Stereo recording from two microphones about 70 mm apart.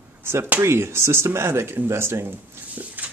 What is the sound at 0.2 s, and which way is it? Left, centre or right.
Speech, right.